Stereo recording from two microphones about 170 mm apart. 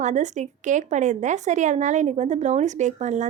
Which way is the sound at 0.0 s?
45° right (ahead or behind).